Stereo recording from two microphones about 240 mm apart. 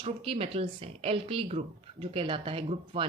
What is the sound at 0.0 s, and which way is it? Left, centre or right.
Speech, right.